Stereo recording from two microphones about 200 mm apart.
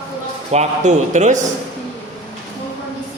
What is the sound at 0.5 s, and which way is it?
Speech, 35° right (ahead or behind).